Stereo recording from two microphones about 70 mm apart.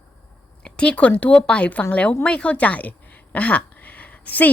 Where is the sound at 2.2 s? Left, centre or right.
Centre.